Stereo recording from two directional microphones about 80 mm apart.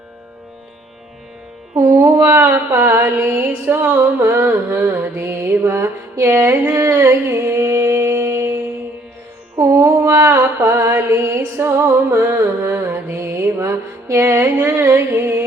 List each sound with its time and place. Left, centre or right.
1.7 s music: right
9.6 s mantra: right